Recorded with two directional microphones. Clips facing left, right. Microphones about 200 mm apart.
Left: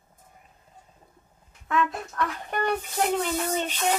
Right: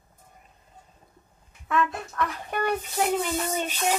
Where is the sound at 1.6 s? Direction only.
Centre (ahead or behind).